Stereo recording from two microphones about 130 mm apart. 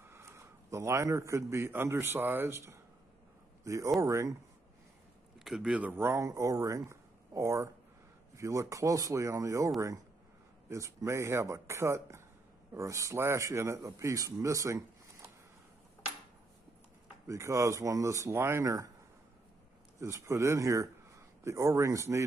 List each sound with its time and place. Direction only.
0.0 s a man's voice: 20° right (ahead or behind)
5.4 s speech: 5° right (ahead or behind); by 14.8 s 25° right (ahead or behind)
17.3 s speech: 25° right (ahead or behind)
20.0 s speech: 20° right (ahead or behind)